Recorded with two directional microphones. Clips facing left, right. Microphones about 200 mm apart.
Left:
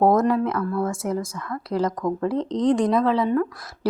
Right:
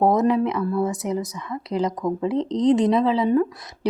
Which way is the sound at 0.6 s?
20° right (ahead or behind).